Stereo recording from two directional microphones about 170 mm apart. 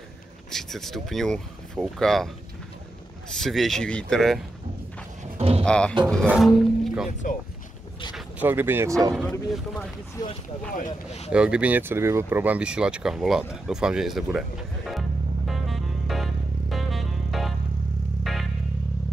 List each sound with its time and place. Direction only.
0.5 s speech: centre (ahead or behind)
3.3 s speech: centre (ahead or behind)
5.2 s a sound: 35° right (ahead or behind)
5.6 s speech: 5° left (ahead or behind)
8.1 s speech: 10° right (ahead or behind)
9.1 s speech: centre (ahead or behind)
11.1 s speech: 40° left (ahead or behind)
11.3 s a sound: 5° right (ahead or behind)
18.2 s music: centre (ahead or behind)